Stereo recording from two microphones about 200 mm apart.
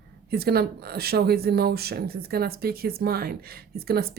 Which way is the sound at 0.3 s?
50° right (ahead or behind).